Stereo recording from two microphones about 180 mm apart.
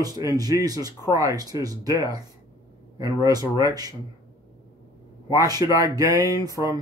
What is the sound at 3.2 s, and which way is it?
Speech, 20° right (ahead or behind).